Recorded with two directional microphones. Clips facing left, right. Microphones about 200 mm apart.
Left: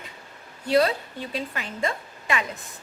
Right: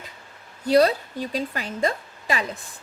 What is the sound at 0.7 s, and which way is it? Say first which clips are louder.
A woman's voice: right 3 dB; 40° right (ahead or behind).